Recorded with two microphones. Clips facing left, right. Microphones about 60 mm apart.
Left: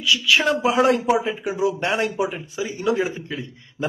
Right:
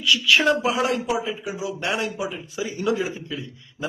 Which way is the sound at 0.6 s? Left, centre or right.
Left.